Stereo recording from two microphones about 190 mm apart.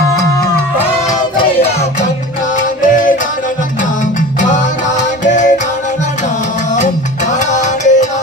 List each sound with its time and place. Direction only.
5.2 s music: 40° left (ahead or behind)
7.3 s salsa music: 40° left (ahead or behind)